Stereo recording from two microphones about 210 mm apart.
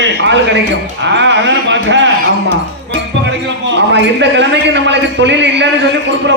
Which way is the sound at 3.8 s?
55° right (ahead or behind).